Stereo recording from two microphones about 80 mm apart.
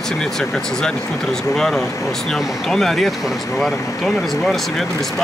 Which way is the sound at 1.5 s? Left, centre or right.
Centre.